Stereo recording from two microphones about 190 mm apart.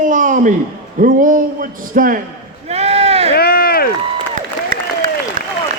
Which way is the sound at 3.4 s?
50° left (ahead or behind).